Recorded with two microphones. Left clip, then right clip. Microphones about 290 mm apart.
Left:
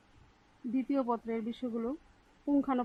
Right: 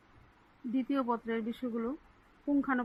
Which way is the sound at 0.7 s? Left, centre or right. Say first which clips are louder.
Even; centre.